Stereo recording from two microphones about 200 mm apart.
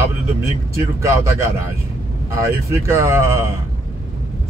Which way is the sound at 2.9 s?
10° right (ahead or behind).